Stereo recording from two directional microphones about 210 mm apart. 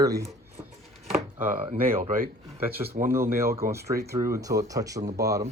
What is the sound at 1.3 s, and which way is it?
Speech, 35° right (ahead or behind).